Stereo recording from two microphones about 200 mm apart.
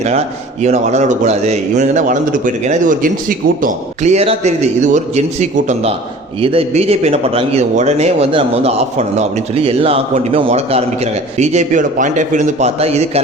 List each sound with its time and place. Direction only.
0.6 s a man's voice: 35° right (ahead or behind)